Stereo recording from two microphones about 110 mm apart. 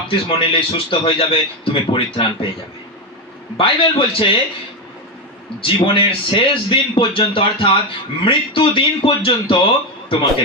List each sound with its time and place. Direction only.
0.1 s a man's voice: 55° left (ahead or behind)
3.6 s a man's voice: 55° left (ahead or behind)
5.6 s a man's voice: 50° left (ahead or behind)